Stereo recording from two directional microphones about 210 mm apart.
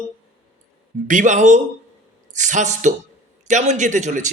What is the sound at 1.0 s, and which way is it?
A man's voice, 35° right (ahead or behind).